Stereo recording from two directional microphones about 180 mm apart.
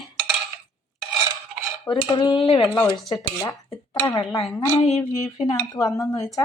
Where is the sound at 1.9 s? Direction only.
25° left (ahead or behind).